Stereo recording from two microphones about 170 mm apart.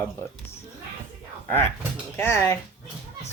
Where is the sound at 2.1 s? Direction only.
15° left (ahead or behind).